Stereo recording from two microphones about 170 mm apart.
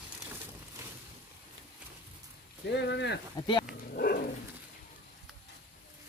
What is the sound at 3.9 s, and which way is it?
Dog, 60° left (ahead or behind).